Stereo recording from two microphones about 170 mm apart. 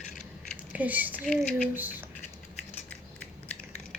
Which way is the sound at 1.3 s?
5° left (ahead or behind).